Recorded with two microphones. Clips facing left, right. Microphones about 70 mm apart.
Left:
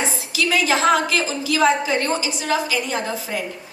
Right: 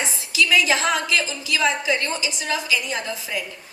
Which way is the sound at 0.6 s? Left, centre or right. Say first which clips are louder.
Left 4 dB; left.